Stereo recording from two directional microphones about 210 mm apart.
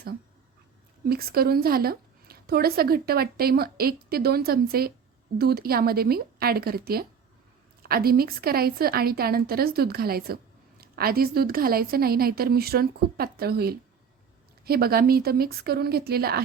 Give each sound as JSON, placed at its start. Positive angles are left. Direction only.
{"t": 1.0, "sound": "a woman's voice", "side_deg": -45}